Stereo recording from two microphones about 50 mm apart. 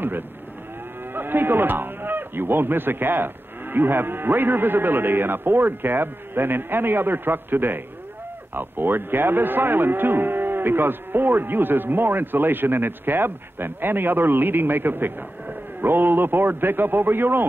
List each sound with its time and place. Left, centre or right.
1.1 s speech: right
3.7 s cattle: right